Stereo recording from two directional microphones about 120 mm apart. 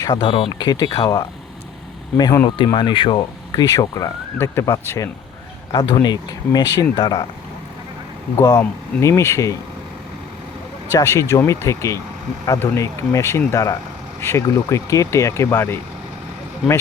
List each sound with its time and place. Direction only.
0.0 s speech: 35° left (ahead or behind)
8.4 s speech: 25° left (ahead or behind)
10.9 s speech: 25° left (ahead or behind)